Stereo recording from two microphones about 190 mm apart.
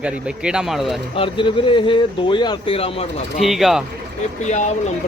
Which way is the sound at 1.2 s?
25° left (ahead or behind).